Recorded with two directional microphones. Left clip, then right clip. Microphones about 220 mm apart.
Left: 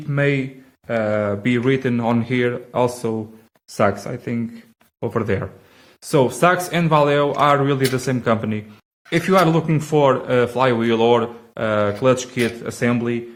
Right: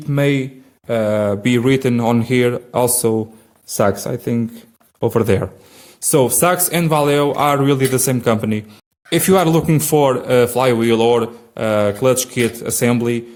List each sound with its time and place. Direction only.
0.1 s speech: 55° right (ahead or behind)